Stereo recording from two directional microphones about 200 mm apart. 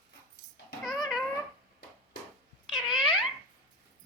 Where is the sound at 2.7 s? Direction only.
Centre (ahead or behind).